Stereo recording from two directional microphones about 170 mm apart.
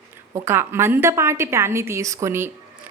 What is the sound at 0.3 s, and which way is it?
A woman's voice, 15° right (ahead or behind).